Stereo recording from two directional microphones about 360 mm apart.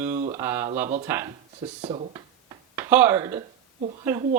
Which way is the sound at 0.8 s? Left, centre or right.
Centre.